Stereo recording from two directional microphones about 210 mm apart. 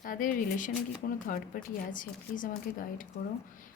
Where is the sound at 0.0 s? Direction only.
40° left (ahead or behind).